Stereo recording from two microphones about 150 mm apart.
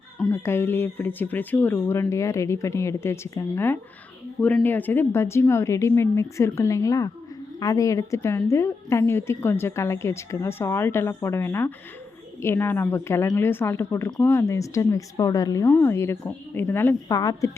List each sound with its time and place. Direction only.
0.2 s a woman's voice: 15° left (ahead or behind)